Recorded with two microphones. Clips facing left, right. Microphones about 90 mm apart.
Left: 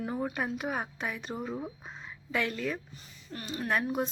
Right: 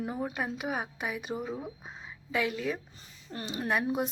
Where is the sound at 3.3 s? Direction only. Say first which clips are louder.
Right 1 dB; 25° right (ahead or behind).